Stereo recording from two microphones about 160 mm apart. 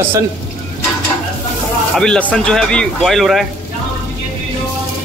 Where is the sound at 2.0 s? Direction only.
5° left (ahead or behind).